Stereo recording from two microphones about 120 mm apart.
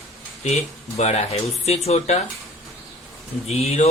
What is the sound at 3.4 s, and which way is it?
Speech, 60° left (ahead or behind).